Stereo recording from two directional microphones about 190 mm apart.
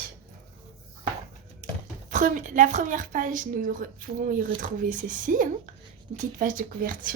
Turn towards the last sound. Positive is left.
turn(degrees=-45)  # may be behind; listen again after turning